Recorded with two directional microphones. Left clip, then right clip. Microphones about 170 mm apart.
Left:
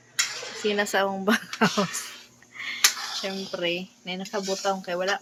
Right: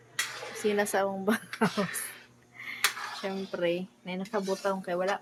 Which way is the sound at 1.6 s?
20° left (ahead or behind).